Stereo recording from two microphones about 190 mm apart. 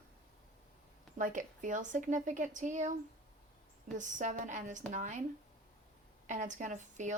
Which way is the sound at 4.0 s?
40° right (ahead or behind).